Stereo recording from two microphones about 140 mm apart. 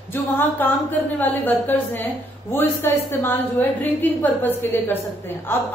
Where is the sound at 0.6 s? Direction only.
15° left (ahead or behind).